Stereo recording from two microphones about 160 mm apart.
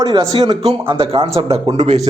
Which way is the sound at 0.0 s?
25° right (ahead or behind).